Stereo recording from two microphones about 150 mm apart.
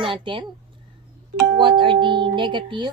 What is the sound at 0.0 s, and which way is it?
Speech, 35° right (ahead or behind).